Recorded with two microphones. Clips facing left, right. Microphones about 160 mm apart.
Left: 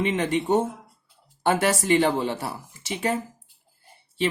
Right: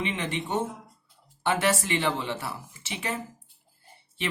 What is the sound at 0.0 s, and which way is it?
A man's voice, 45° left (ahead or behind).